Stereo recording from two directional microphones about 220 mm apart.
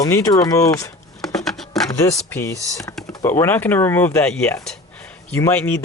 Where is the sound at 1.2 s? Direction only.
Centre (ahead or behind).